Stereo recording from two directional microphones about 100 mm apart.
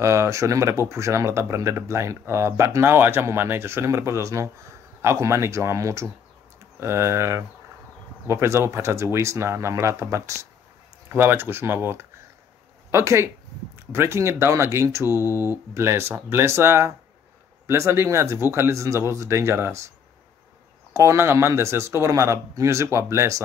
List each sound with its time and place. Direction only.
0.0 s speech: 30° right (ahead or behind)
15.0 s speech: 30° left (ahead or behind)
15.7 s speech: 25° right (ahead or behind)
20.9 s speech: 30° right (ahead or behind)